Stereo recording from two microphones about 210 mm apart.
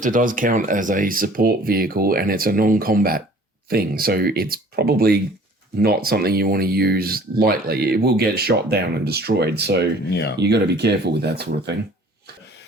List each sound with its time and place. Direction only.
0.0 s speech: 40° right (ahead or behind)